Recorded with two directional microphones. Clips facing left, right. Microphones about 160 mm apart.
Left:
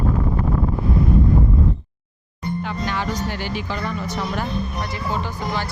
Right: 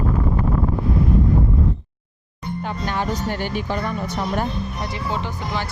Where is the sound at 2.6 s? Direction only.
45° right (ahead or behind).